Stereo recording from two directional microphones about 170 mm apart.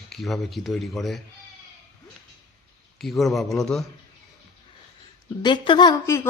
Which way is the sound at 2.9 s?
Centre (ahead or behind).